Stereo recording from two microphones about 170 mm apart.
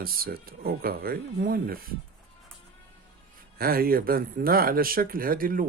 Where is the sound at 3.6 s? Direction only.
60° right (ahead or behind).